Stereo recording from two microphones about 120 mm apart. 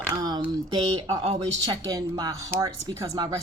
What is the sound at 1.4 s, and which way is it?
Speech, 30° right (ahead or behind).